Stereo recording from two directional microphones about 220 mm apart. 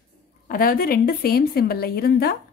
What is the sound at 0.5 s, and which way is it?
A woman's voice, 40° left (ahead or behind).